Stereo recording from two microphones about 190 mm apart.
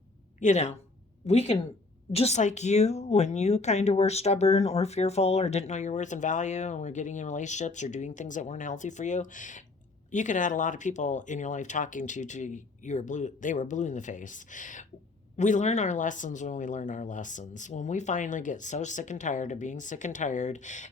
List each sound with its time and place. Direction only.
0.3 s a woman's voice: 40° left (ahead or behind)